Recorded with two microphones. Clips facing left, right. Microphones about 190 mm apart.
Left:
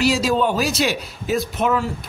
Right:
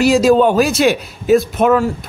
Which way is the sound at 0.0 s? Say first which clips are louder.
Right 8 dB; 50° right (ahead or behind).